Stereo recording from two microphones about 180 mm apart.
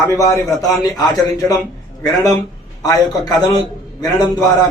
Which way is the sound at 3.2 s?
20° left (ahead or behind).